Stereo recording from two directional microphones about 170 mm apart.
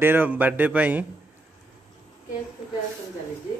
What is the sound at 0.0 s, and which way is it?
A man's voice, 10° right (ahead or behind).